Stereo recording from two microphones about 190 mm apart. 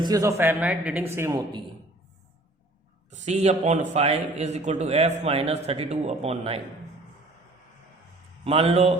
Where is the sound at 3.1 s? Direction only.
35° right (ahead or behind).